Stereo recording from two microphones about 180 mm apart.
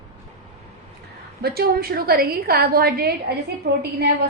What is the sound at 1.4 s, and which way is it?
A woman's voice, 60° right (ahead or behind).